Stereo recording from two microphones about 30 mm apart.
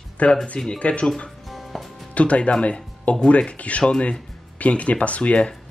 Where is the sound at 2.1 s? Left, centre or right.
Left.